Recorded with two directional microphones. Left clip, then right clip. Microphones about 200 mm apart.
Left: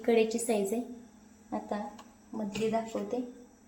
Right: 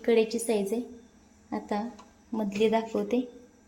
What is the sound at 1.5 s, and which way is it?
Speech, 35° right (ahead or behind).